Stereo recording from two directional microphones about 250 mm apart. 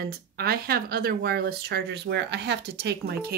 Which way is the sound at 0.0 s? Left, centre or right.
Right.